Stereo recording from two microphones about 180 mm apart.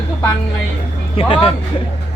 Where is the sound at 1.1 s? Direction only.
30° left (ahead or behind).